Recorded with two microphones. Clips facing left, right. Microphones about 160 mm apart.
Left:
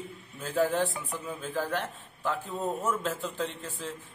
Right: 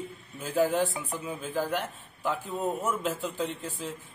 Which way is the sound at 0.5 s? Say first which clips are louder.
Right 1 dB; 10° right (ahead or behind).